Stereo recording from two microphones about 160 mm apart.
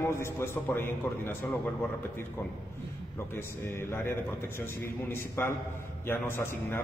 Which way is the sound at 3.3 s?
15° left (ahead or behind).